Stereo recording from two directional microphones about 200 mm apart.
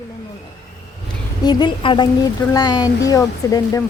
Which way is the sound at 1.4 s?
20° left (ahead or behind).